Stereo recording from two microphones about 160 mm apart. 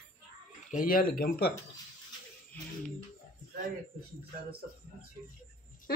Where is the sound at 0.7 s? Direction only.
60° left (ahead or behind).